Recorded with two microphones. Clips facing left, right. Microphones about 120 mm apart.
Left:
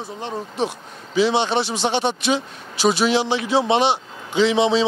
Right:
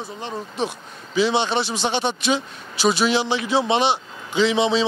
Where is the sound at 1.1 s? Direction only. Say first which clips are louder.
Left 1 dB; 55° left (ahead or behind).